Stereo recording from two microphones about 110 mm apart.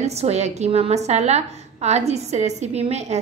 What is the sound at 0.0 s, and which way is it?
A woman's voice, 85° right.